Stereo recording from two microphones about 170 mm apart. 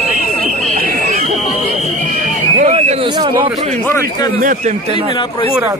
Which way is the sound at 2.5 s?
40° right (ahead or behind).